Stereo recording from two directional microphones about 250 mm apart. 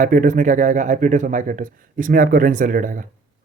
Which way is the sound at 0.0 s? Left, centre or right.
Right.